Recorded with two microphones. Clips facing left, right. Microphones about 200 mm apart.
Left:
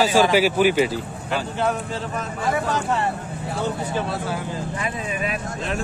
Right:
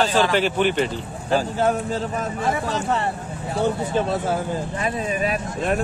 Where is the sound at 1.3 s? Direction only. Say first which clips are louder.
Right 4 dB; 40° right (ahead or behind).